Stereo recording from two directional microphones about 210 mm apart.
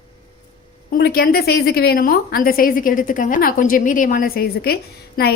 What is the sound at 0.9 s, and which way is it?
A woman's voice, 50° left (ahead or behind).